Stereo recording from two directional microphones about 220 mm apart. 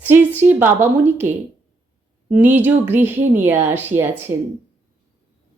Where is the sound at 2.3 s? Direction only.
10° right (ahead or behind).